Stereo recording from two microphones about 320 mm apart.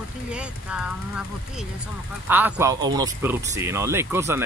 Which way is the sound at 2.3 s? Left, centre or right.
Centre.